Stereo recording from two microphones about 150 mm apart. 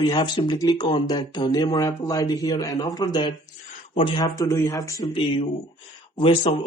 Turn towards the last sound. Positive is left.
turn(degrees=35)  # may be behind; listen again after turning